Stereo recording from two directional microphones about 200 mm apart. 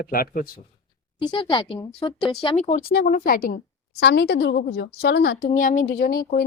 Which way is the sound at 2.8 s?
50° left (ahead or behind).